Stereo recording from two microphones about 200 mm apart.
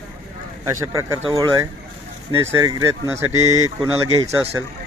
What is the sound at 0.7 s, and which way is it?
Speech, 15° right (ahead or behind).